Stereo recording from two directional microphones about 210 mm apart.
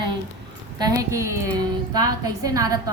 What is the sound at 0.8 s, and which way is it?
A woman's voice, 15° right (ahead or behind).